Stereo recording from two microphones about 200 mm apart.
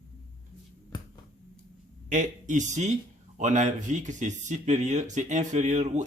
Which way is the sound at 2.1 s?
40° right (ahead or behind).